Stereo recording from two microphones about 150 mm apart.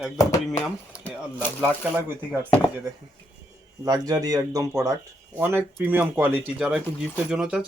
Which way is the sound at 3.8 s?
25° right (ahead or behind).